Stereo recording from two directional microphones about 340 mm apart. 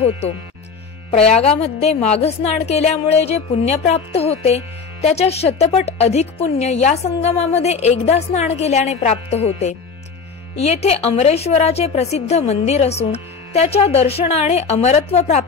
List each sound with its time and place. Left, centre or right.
1.1 s a woman's voice: centre